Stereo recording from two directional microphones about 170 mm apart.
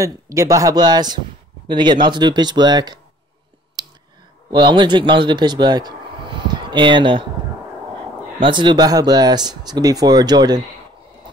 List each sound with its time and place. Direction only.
0.0 s speech: 20° right (ahead or behind)
4.5 s speech: 25° right (ahead or behind)
8.4 s speech: 30° right (ahead or behind)